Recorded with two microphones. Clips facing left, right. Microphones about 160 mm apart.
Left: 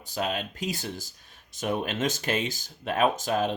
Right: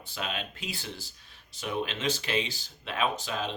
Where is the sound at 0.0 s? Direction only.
40° left (ahead or behind).